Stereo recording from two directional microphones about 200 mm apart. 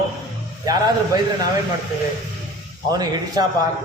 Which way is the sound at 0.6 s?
20° right (ahead or behind).